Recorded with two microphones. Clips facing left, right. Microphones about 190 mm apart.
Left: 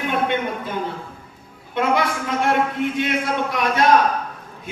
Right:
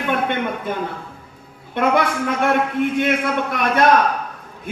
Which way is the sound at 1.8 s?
55° right (ahead or behind).